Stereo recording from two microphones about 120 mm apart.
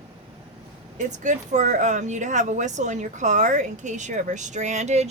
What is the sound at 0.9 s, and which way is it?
Speech, 90° right.